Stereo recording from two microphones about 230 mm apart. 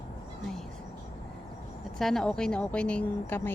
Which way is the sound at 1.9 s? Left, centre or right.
Centre.